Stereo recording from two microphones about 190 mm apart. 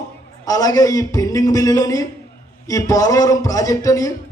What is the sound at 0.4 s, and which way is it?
A man's voice, 20° left (ahead or behind).